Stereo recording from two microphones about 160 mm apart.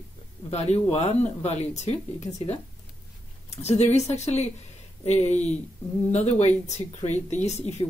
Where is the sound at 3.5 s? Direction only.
40° left (ahead or behind).